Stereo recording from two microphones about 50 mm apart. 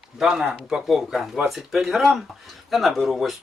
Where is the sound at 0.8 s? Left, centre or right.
Centre.